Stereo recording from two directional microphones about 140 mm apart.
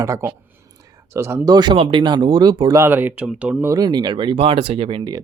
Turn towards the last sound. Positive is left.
turn(degrees=-35)  # may be behind; listen again after turning